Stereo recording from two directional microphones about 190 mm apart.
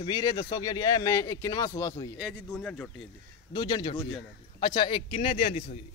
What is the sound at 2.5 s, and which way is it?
Speech, 5° left (ahead or behind).